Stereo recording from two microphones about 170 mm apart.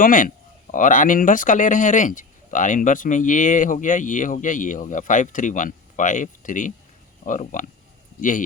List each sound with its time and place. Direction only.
0.0 s speech: 55° left (ahead or behind)